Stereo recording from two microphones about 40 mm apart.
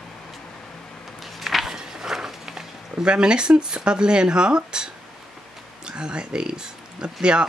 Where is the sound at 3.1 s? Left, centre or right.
Right.